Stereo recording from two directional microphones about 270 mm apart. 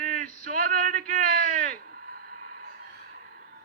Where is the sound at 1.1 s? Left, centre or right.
Right.